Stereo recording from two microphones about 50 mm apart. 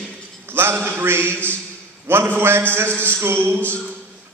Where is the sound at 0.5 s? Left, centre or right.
Right.